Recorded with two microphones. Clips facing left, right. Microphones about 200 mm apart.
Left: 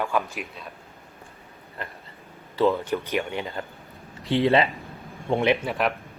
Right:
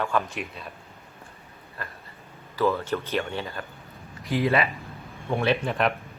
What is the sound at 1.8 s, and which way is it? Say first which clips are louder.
Speech: left 2 dB; 20° left (ahead or behind).